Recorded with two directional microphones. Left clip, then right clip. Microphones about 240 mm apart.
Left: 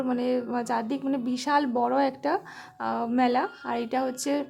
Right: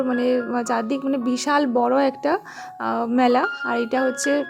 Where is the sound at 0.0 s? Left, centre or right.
Centre.